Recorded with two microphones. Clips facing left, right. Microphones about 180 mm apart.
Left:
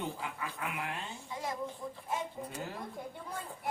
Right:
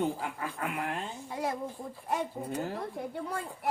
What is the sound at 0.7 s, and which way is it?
Speech, 45° right (ahead or behind).